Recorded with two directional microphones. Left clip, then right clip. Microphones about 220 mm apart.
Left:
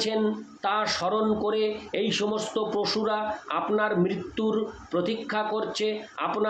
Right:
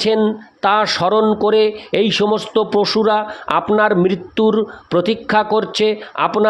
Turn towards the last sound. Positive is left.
turn(degrees=-50)  # may be behind; listen again after turning